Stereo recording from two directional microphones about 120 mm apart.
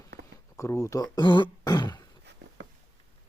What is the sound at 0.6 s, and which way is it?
Speech, 25° left (ahead or behind).